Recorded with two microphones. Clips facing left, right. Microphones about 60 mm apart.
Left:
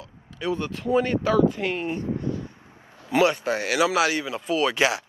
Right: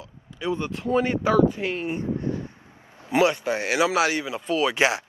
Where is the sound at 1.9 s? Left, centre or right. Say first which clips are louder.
Right 1 dB; right.